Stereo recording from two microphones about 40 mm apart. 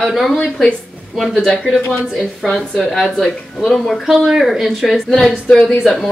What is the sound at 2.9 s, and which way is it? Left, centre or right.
Speech, centre.